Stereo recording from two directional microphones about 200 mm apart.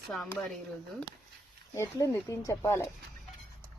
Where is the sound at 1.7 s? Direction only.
15° left (ahead or behind).